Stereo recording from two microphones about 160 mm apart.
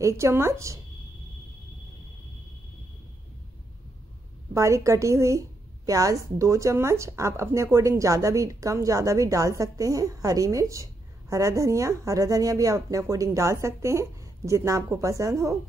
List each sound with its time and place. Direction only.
0.0 s speech: 15° right (ahead or behind)
4.6 s speech: 20° right (ahead or behind)